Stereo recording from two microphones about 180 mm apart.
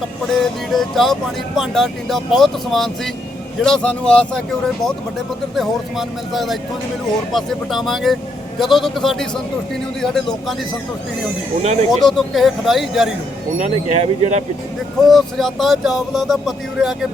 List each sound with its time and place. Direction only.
0.7 s speech: centre (ahead or behind)
5.5 s speech: centre (ahead or behind)
11.6 s speech: 35° right (ahead or behind)
11.9 s speech: centre (ahead or behind)
13.6 s speech: 35° right (ahead or behind)
15.0 s speech: centre (ahead or behind)